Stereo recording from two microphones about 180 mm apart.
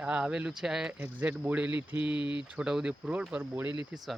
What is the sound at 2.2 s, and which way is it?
Speech, 25° left (ahead or behind).